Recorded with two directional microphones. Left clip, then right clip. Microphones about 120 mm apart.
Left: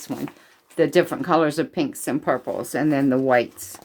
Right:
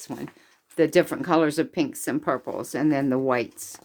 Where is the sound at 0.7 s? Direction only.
60° right (ahead or behind).